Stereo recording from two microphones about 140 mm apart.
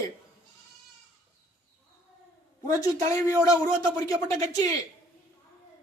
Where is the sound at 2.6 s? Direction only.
25° left (ahead or behind).